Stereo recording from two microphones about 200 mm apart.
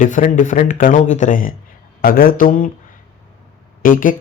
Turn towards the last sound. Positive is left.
turn(degrees=45)  # may be behind; listen again after turning